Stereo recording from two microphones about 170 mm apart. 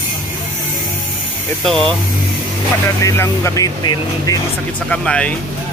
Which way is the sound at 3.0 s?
15° left (ahead or behind).